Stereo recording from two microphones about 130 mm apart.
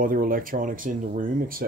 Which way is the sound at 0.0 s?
90° right.